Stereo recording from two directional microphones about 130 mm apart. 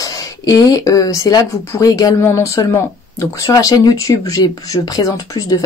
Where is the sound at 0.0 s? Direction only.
25° left (ahead or behind).